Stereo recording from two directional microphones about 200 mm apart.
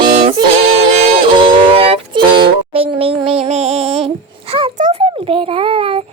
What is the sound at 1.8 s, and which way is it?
Music, 25° right (ahead or behind).